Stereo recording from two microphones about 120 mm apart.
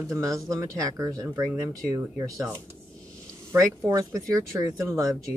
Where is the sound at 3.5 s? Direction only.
25° right (ahead or behind).